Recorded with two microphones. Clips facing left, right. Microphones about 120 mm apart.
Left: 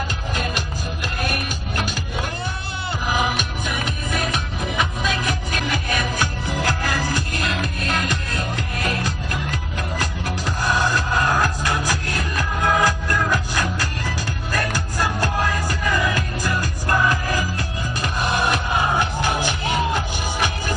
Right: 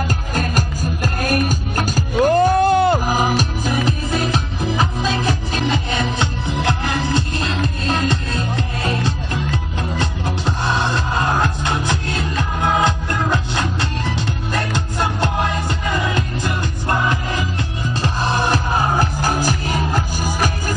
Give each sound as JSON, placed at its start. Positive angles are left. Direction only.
{"t": 0.3, "sound": "music", "side_deg": -45}